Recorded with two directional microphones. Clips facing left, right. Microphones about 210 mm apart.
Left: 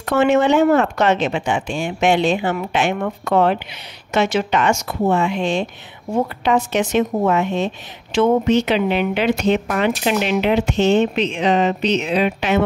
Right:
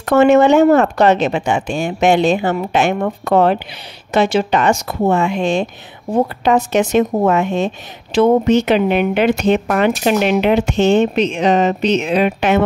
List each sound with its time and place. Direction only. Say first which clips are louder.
0.0 s speech: right 5 dB; 45° right (ahead or behind)